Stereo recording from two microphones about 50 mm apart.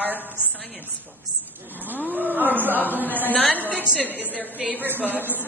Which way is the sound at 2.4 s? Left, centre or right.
Right.